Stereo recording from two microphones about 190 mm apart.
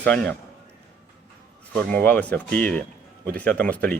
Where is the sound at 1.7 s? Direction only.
5° left (ahead or behind).